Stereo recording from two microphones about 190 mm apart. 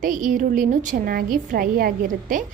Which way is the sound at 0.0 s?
45° right (ahead or behind).